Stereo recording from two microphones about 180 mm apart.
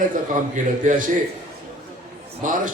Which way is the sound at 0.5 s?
45° right (ahead or behind).